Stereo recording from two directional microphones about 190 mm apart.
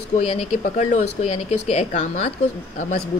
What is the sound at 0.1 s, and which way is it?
Speech, 35° left (ahead or behind).